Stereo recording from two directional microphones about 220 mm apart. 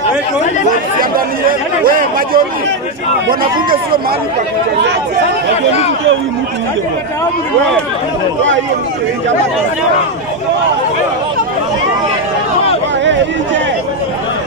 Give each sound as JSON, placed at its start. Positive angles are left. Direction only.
{"t": 1.9, "sound": "speech", "side_deg": -40}
{"t": 5.5, "sound": "speech", "side_deg": 30}